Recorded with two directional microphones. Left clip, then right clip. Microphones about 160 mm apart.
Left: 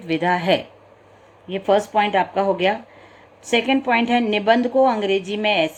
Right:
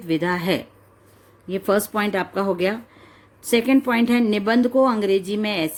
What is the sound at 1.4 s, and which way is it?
A woman's voice, 70° right (ahead or behind).